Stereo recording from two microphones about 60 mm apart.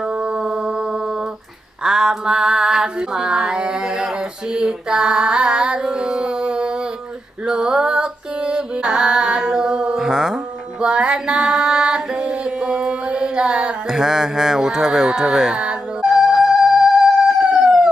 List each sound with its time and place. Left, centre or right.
0.0 s mantra: centre
7.4 s female singing: centre
17.4 s chicken: right